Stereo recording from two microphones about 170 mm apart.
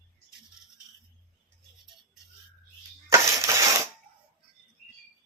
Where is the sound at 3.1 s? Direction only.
20° right (ahead or behind).